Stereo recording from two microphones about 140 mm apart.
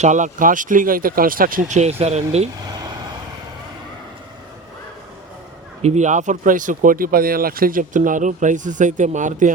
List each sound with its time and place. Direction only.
0.0 s speech: 60° right (ahead or behind)
5.8 s speech: 55° right (ahead or behind)